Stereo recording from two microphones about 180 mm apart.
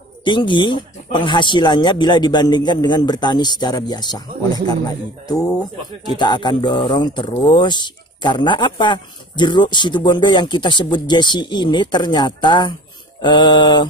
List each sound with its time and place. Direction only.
0.2 s speech: 25° left (ahead or behind)